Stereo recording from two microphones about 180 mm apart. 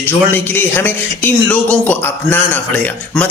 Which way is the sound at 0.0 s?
10° left (ahead or behind).